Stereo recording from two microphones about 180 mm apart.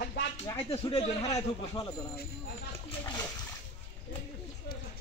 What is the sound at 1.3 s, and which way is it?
A man's voice, 20° left (ahead or behind).